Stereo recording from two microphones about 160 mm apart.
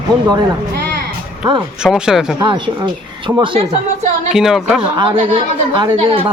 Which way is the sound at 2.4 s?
30° right (ahead or behind).